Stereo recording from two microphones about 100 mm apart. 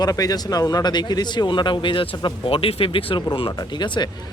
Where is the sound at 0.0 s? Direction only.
40° left (ahead or behind); by 3.2 s 60° left (ahead or behind).